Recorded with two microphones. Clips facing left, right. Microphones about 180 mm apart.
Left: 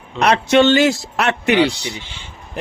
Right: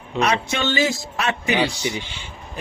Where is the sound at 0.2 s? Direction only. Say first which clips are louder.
Left 8 dB; 70° left (ahead or behind).